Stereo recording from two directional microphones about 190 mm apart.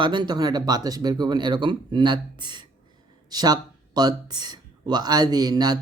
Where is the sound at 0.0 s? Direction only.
25° right (ahead or behind).